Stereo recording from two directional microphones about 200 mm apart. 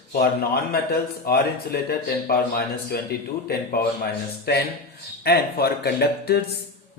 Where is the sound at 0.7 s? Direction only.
50° left (ahead or behind).